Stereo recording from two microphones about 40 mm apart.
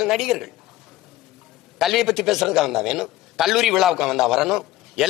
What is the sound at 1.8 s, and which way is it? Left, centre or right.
A man's voice, centre.